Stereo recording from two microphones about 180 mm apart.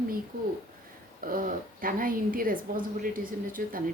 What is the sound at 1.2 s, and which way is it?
Speech, 50° right (ahead or behind).